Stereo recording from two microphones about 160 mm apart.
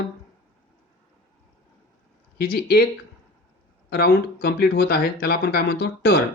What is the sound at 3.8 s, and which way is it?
Speech, 80° left.